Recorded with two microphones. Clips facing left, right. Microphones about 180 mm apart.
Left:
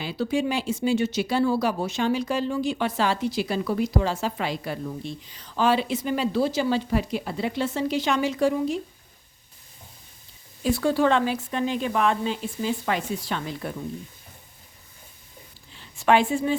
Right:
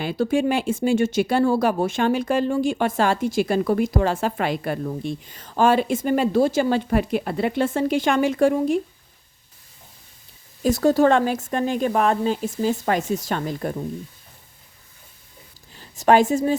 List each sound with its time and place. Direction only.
0.0 s speech: 50° right (ahead or behind)
10.6 s speech: 40° right (ahead or behind)
15.7 s a woman's voice: 40° right (ahead or behind)